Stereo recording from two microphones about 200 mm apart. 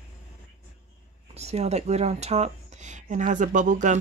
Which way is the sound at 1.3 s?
30° right (ahead or behind).